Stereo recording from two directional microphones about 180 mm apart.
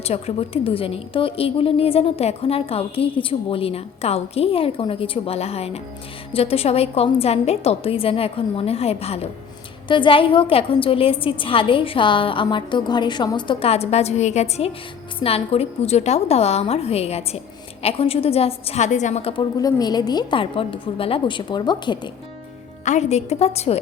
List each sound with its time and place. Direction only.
0.0 s a woman's voice: 35° left (ahead or behind)
22.8 s a woman's voice: 40° left (ahead or behind)